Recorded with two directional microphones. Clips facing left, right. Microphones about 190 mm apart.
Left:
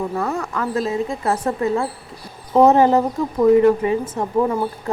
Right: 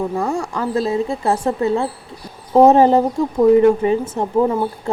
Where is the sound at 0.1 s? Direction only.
15° right (ahead or behind).